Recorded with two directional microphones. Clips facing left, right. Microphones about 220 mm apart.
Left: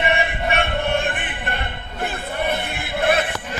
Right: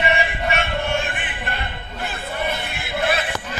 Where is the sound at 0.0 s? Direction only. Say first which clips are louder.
Even; 55° left (ahead or behind).